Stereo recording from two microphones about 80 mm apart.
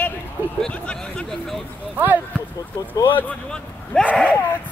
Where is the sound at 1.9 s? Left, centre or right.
Right.